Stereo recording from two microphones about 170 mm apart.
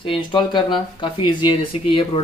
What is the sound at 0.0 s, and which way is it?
Speech, 30° left (ahead or behind).